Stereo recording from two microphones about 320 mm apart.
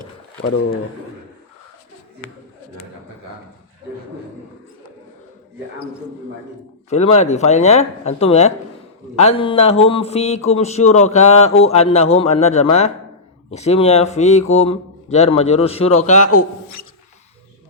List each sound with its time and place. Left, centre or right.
6.9 s a man's voice: centre
16.3 s speech: left